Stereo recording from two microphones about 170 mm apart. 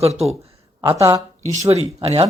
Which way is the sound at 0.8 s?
15° right (ahead or behind).